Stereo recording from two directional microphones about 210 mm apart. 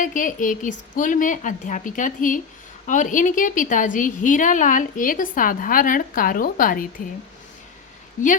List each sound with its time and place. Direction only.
0.0 s a woman's voice: 40° left (ahead or behind)